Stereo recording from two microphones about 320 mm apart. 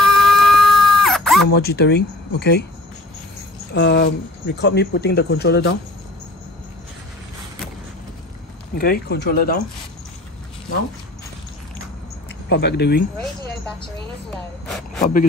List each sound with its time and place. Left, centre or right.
0.0 s a sound: centre
1.8 s speech: left
3.7 s speech: left
8.7 s speech: left
12.4 s speech: left
15.0 s speech: left